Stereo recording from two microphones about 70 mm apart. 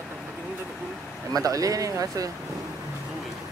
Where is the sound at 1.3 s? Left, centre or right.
Right.